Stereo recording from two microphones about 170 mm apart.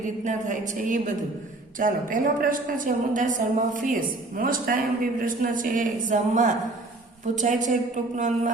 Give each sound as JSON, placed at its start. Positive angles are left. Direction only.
{"t": 0.3, "sound": "a woman's voice", "side_deg": -50}